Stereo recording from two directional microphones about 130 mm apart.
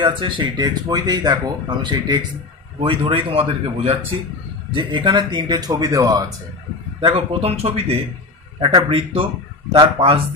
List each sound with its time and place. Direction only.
0.0 s speech: 40° right (ahead or behind)
7.0 s speech: 45° right (ahead or behind)
8.5 s speech: 35° right (ahead or behind)